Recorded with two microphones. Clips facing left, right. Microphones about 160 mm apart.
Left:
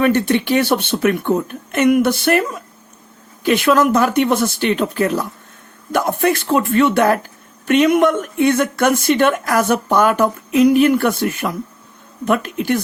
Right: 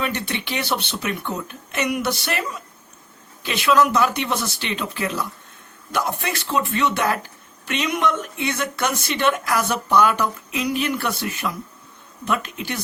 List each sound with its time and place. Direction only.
0.0 s speech: 50° left (ahead or behind)